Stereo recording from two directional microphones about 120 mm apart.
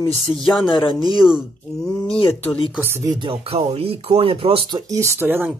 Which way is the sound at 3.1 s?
45° right (ahead or behind).